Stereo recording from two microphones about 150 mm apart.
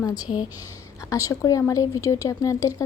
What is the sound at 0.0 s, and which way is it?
Speech, 25° left (ahead or behind).